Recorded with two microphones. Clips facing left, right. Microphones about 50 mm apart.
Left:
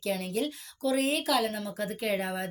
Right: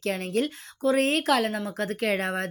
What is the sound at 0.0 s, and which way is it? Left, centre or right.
Speech, right.